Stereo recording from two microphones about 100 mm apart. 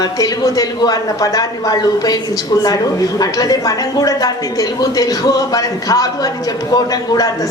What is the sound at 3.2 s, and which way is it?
Speech, 40° left (ahead or behind).